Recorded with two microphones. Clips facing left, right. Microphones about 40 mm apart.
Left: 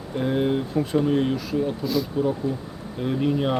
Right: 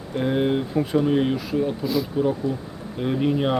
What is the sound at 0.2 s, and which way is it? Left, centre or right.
Speech, centre.